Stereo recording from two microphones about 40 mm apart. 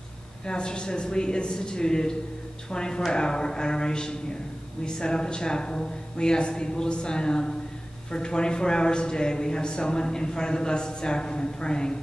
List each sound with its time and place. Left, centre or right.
0.5 s speech: left